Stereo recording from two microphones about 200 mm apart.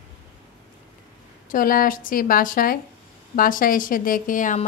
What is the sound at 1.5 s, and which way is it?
A woman's voice, 45° left (ahead or behind).